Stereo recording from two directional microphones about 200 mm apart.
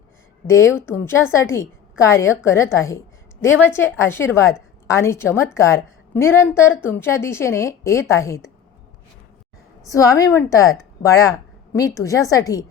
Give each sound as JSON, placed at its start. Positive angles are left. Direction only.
{"t": 0.4, "sound": "a woman's voice", "side_deg": 15}
{"t": 9.8, "sound": "a woman's voice", "side_deg": 15}